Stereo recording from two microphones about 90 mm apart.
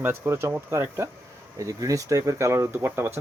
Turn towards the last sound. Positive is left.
turn(degrees=-25)  # may be behind; listen again after turning